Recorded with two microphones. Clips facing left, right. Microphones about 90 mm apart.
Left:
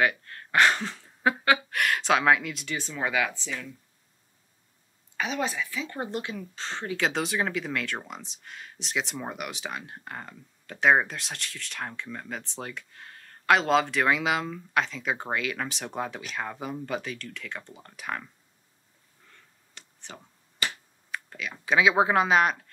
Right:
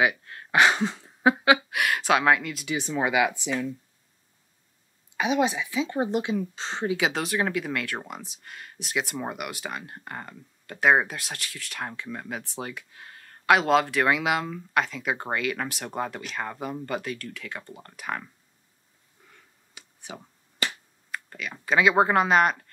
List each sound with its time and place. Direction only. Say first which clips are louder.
0.0 s speech: right 1 dB; 10° right (ahead or behind)
2.7 s speech: right 5 dB; 15° right (ahead or behind)
5.1 s speech: right 6 dB; 15° right (ahead or behind)
7.1 s speech: right 1 dB; centre (ahead or behind)
19.2 s a sound: right 1 dB; 10° right (ahead or behind)
21.1 s speech: even; centre (ahead or behind)